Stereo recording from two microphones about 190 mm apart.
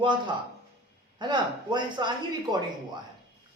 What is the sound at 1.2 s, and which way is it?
A woman's voice, 25° right (ahead or behind).